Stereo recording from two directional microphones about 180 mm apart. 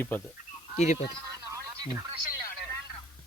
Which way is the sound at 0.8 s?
40° left (ahead or behind).